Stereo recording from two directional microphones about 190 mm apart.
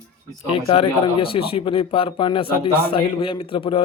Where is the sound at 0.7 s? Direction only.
30° left (ahead or behind).